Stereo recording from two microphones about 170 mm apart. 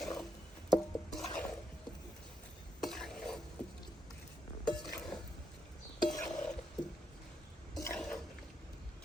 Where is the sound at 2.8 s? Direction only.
5° left (ahead or behind).